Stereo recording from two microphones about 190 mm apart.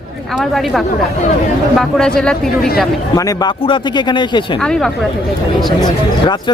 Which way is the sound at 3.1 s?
20° left (ahead or behind).